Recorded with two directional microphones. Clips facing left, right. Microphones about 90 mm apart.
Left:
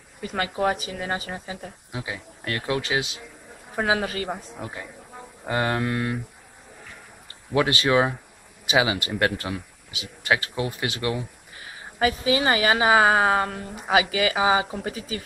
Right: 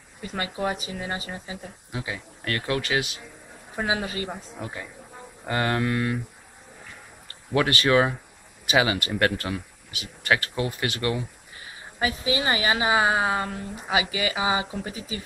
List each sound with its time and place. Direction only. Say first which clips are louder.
0.3 s speech: left 4 dB; 50° left (ahead or behind)
1.9 s speech: right 1 dB; 15° left (ahead or behind)
3.7 s speech: left 3 dB; 45° left (ahead or behind)
4.6 s speech: even; 10° left (ahead or behind)
7.5 s speech: even; 15° left (ahead or behind)
12.0 s speech: left 4 dB; 50° left (ahead or behind)
12.4 s a woman's voice: left 4 dB; 40° left (ahead or behind)